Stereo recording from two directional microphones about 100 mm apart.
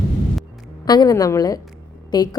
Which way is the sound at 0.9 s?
45° left (ahead or behind).